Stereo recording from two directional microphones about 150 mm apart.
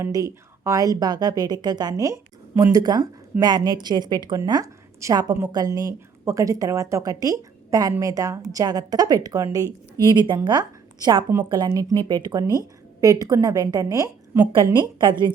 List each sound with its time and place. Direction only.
0.0 s speech: 20° right (ahead or behind)